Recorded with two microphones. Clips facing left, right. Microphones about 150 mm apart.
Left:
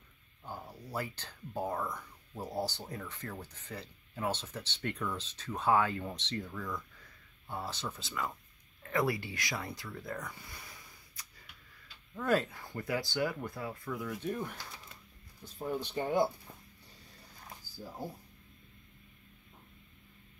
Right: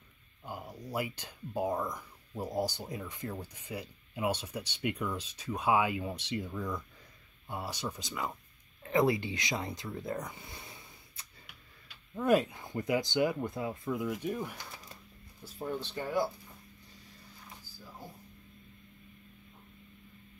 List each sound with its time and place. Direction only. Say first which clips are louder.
0.5 s speech: right 3 dB; 10° right (ahead or behind)
14.3 s speech: right 1 dB; 10° right (ahead or behind)
15.6 s speech: left 1 dB; 10° left (ahead or behind)